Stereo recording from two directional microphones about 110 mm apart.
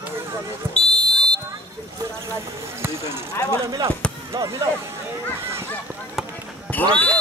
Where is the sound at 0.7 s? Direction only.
5° left (ahead or behind).